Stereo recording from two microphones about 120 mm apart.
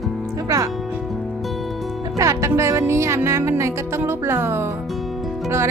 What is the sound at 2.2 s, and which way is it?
Music, 25° right (ahead or behind).